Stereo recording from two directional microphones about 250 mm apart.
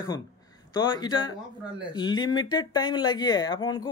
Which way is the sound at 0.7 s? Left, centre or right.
Centre.